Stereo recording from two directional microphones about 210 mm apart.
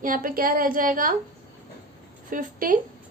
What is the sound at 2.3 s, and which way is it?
Speech, 40° right (ahead or behind).